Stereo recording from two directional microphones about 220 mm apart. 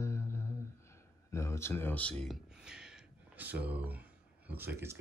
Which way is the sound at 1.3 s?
10° left (ahead or behind).